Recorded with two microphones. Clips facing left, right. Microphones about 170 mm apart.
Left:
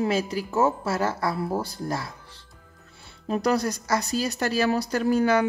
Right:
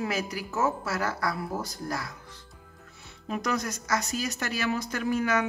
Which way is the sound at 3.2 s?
35° left (ahead or behind).